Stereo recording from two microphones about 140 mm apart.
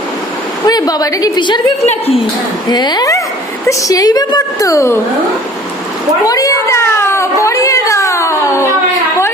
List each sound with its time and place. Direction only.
0.6 s a woman's voice: 25° left (ahead or behind)
1.9 s a woman's voice: 45° left (ahead or behind)
2.6 s a woman's voice: 30° left (ahead or behind)
6.2 s a sound: 25° left (ahead or behind)